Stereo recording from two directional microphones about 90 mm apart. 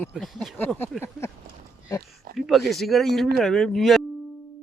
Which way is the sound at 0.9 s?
5° right (ahead or behind).